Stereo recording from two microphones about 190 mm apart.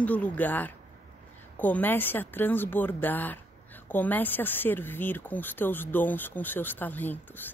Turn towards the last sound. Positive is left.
turn(degrees=10)  # may be behind; listen again after turning